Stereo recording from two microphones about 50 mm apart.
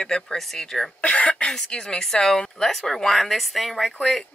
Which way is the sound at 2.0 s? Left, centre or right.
Centre.